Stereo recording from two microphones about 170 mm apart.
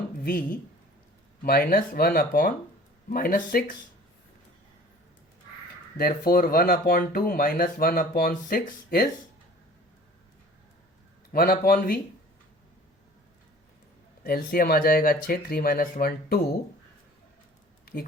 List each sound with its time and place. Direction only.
1.4 s speech: 60° left (ahead or behind)
6.0 s speech: 60° left (ahead or behind)
11.3 s speech: 60° left (ahead or behind)
14.3 s speech: 60° left (ahead or behind)